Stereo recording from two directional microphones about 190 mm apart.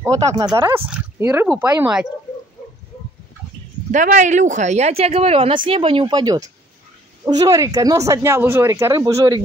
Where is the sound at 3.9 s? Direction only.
40° right (ahead or behind).